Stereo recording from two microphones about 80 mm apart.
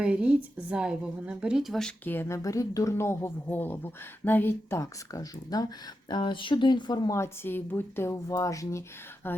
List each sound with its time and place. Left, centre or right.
0.0 s speech: centre
2.2 s speech: left
6.1 s speech: left
7.1 s speech: left